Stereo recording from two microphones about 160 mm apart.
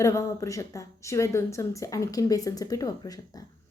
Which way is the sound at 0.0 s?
20° left (ahead or behind).